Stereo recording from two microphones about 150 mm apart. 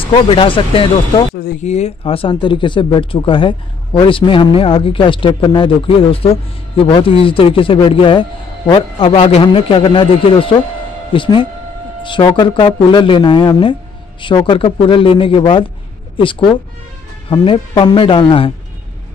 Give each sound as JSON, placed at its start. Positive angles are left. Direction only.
{"t": 0.0, "sound": "speech", "side_deg": 35}
{"t": 1.3, "sound": "speech", "side_deg": 85}
{"t": 1.6, "sound": "speech", "side_deg": 50}